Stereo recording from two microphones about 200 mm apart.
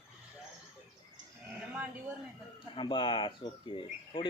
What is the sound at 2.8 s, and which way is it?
Speech, 25° left (ahead or behind).